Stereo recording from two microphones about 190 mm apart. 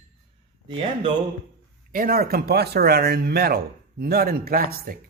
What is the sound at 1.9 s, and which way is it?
A man's voice, 50° right (ahead or behind).